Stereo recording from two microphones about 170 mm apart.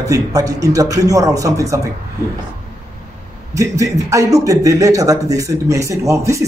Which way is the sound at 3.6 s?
20° right (ahead or behind).